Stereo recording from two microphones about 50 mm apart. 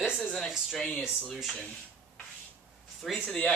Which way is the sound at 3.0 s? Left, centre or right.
Centre.